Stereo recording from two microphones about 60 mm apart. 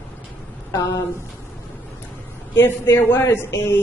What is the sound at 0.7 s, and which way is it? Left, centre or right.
Speech, left.